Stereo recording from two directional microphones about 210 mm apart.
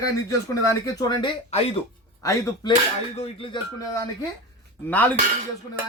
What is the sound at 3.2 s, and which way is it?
Speech, 25° left (ahead or behind).